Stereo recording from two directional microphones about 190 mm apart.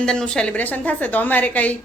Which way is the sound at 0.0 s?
5° left (ahead or behind).